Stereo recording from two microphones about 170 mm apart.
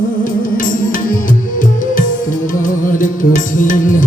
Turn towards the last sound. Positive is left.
turn(degrees=50)  # may be behind; listen again after turning